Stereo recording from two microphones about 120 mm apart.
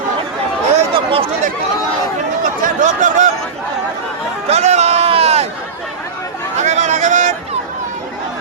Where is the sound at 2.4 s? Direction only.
90° right.